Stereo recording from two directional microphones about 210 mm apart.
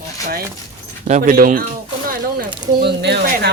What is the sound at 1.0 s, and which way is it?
Speech, 35° right (ahead or behind).